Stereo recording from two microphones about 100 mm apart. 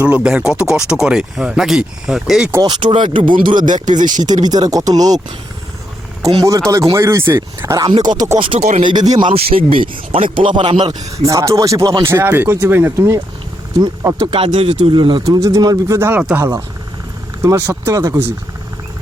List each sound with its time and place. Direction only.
0.0 s speech: 10° right (ahead or behind)
2.6 s speech: 45° right (ahead or behind)
2.9 s speech: 60° right (ahead or behind); by 5.2 s 40° right (ahead or behind)
6.2 s speech: 30° right (ahead or behind)
7.9 s speech: 45° right (ahead or behind)
8.4 s speech: 60° right (ahead or behind)
9.3 s speech: 75° right (ahead or behind); by 10.9 s 55° right (ahead or behind)
11.3 s speech: 30° right (ahead or behind)
14.3 s speech: 65° right (ahead or behind); by 16.0 s 35° right (ahead or behind)
16.0 s speech: 20° right (ahead or behind)
16.4 s speech: 30° right (ahead or behind)